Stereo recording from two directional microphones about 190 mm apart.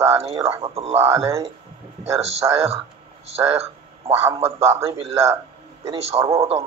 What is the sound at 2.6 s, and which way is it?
A man's voice, 30° right (ahead or behind).